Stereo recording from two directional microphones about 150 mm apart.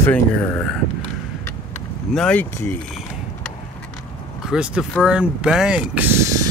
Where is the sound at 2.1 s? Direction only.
10° left (ahead or behind).